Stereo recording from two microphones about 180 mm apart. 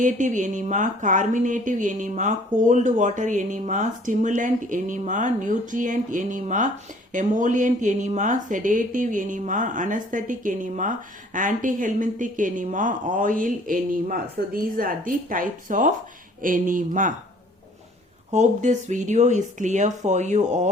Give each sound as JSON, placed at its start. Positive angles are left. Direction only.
{"t": 0.0, "sound": "speech", "side_deg": -45}
{"t": 18.3, "sound": "speech", "side_deg": -40}